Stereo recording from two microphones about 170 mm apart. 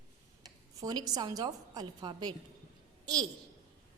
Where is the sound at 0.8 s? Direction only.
20° right (ahead or behind).